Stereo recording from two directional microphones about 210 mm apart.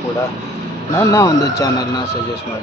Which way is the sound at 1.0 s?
15° left (ahead or behind).